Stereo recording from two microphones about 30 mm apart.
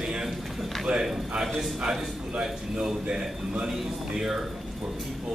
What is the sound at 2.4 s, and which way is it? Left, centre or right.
Speech, centre.